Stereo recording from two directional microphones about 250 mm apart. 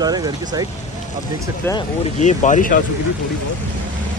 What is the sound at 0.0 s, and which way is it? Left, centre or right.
Speech, centre.